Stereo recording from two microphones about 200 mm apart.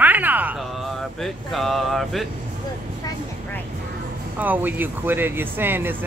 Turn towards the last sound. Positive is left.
turn(degrees=-10)  # may be behind; listen again after turning